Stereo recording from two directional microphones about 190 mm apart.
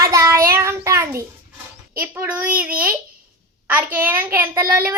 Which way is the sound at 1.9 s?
10° right (ahead or behind).